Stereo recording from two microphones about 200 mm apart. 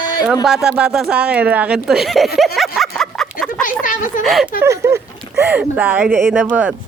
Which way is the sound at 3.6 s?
40° left (ahead or behind).